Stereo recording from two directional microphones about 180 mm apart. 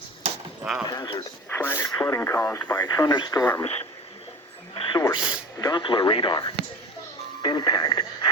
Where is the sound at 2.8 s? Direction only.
20° left (ahead or behind).